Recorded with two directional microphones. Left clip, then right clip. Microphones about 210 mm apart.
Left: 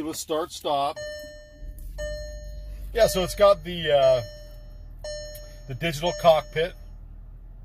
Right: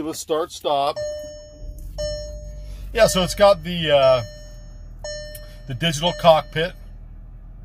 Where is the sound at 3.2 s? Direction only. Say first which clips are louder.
Right 3 dB; 5° right (ahead or behind).